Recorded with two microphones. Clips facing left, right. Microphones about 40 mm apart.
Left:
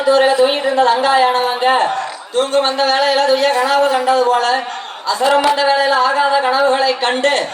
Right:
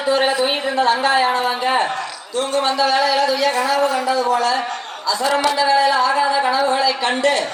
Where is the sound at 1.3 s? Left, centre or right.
Left.